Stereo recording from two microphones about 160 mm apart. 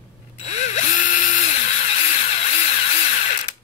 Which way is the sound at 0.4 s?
45° left (ahead or behind).